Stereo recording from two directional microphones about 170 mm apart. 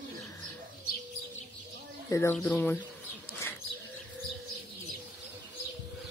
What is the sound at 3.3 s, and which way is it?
Bird, 15° left (ahead or behind).